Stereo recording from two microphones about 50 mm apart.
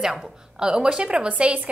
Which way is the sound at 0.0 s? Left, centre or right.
Centre.